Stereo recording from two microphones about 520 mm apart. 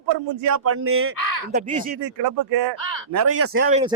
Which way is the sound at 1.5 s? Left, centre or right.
Centre.